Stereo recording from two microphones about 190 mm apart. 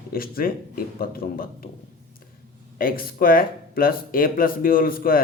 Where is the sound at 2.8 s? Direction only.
50° left (ahead or behind).